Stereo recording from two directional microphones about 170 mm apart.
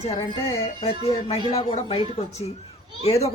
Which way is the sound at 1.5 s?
35° left (ahead or behind).